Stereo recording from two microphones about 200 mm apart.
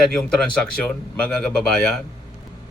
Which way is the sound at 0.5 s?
5° left (ahead or behind).